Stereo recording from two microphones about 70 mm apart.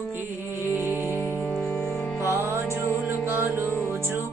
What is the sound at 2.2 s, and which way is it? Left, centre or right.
Music, right.